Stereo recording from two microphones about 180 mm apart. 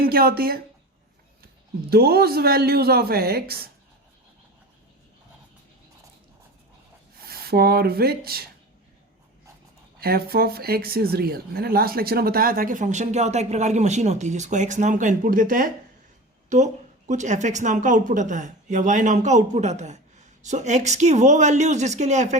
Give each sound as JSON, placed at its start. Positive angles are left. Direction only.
{"t": 0.0, "sound": "speech", "side_deg": -55}
{"t": 1.9, "sound": "speech", "side_deg": -60}
{"t": 7.3, "sound": "speech", "side_deg": -60}
{"t": 10.0, "sound": "speech", "side_deg": -60}